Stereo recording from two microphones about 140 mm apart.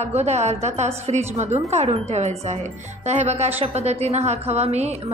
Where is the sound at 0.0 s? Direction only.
50° right (ahead or behind).